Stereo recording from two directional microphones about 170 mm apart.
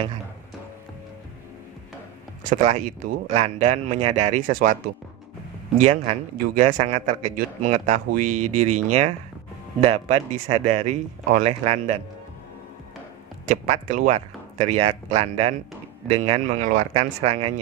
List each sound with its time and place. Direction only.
2.5 s speech: 45° right (ahead or behind)
4.5 s speech: 55° right (ahead or behind)
5.8 s a man's voice: 40° right (ahead or behind)
13.5 s a man's voice: 50° right (ahead or behind)